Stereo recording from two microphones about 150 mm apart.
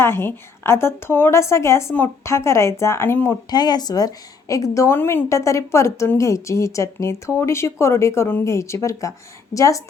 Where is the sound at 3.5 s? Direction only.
25° left (ahead or behind).